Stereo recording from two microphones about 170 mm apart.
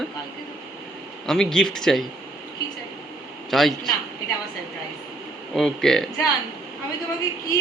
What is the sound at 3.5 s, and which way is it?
Speech, centre (ahead or behind).